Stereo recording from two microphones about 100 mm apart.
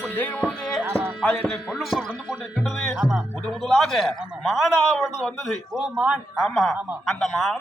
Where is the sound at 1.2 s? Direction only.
10° left (ahead or behind).